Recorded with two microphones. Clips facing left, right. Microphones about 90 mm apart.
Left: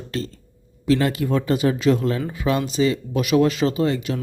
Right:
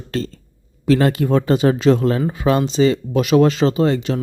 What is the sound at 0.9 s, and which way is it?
Speech, 40° right (ahead or behind).